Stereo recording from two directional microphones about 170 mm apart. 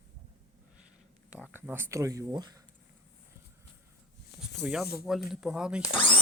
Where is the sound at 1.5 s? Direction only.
10° right (ahead or behind).